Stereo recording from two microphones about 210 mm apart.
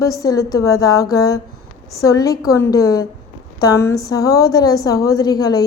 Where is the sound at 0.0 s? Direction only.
15° left (ahead or behind).